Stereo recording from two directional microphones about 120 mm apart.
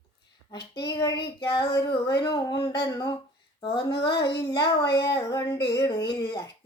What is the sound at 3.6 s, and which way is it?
Child singing, 45° left (ahead or behind).